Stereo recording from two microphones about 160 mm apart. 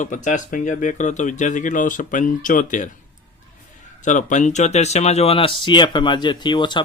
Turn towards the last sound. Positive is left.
turn(degrees=30)  # may be behind; listen again after turning